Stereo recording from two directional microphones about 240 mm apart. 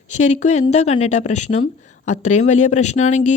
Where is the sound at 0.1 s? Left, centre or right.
Left.